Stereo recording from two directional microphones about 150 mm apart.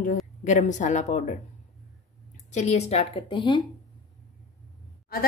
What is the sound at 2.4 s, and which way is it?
A woman's voice, 50° left (ahead or behind).